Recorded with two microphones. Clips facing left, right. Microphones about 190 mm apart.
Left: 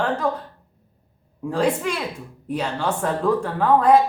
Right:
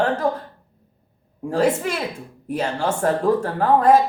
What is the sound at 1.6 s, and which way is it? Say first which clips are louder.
Speech: right 2 dB; 10° right (ahead or behind).